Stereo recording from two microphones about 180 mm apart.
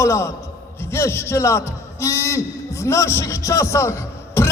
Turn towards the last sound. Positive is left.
turn(degrees=15)  # may be behind; listen again after turning